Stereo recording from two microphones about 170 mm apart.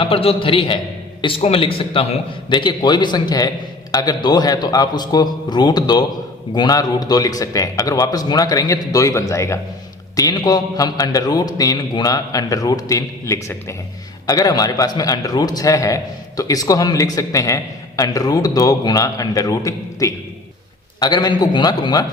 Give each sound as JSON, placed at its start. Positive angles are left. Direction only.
{"t": 0.0, "sound": "a man's voice", "side_deg": 35}